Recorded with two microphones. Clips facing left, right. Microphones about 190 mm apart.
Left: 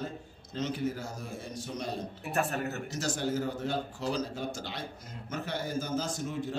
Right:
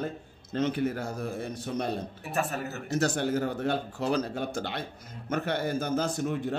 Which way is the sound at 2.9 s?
60° right (ahead or behind).